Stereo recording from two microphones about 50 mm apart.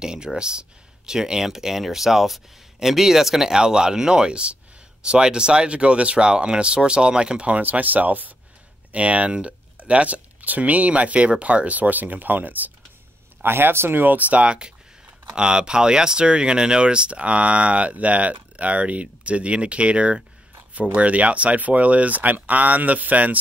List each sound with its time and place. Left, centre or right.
0.0 s speech: centre
7.6 s speech: right
13.4 s speech: right